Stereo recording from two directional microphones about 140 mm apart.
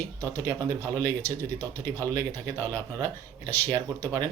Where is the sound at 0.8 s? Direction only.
15° left (ahead or behind).